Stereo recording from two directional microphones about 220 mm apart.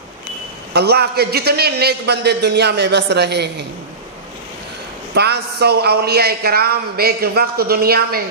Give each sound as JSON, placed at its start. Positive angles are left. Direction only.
{"t": 0.7, "sound": "a man's voice", "side_deg": -45}
{"t": 5.1, "sound": "a man's voice", "side_deg": -50}